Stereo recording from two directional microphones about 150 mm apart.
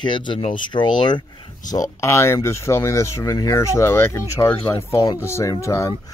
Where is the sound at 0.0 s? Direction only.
30° left (ahead or behind).